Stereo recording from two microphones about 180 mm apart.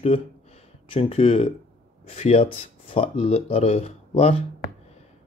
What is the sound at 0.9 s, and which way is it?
Speech, 30° left (ahead or behind).